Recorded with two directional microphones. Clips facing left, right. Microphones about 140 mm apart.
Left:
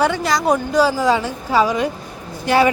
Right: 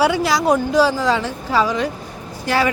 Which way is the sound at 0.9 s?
10° left (ahead or behind).